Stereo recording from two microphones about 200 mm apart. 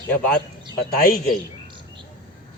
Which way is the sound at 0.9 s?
50° left (ahead or behind).